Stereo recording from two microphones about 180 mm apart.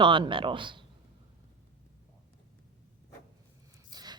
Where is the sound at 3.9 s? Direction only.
20° right (ahead or behind).